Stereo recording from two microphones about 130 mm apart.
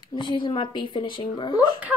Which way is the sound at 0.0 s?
35° left (ahead or behind).